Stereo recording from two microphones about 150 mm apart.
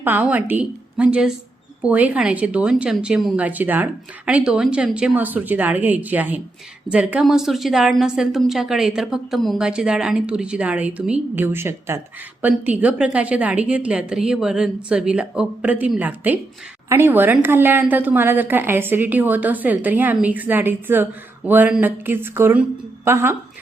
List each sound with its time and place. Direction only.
0.0 s a woman's voice: 10° right (ahead or behind)